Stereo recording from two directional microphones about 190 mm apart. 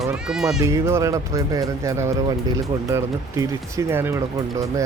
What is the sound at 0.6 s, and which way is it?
Speech, 15° right (ahead or behind).